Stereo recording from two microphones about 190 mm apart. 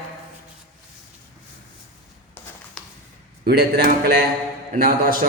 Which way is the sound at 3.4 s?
55° right (ahead or behind).